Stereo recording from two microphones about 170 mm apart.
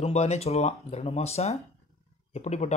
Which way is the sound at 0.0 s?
40° left (ahead or behind).